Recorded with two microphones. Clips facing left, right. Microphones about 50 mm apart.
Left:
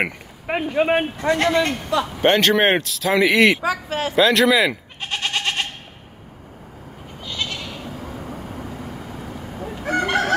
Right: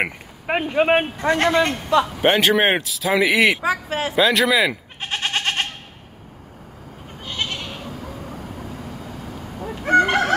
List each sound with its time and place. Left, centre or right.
0.5 s a man's voice: right
2.2 s speech: centre
3.6 s speech: right
4.1 s speech: centre
5.0 s goat: right
7.2 s goat: right
9.7 s chicken: right